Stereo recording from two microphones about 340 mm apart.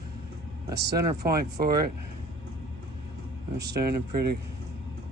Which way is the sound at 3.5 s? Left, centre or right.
Right.